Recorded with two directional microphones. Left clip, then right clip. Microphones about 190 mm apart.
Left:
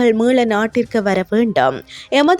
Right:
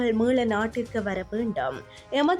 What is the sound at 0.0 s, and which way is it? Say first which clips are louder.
Speech: left 10 dB; 40° left (ahead or behind).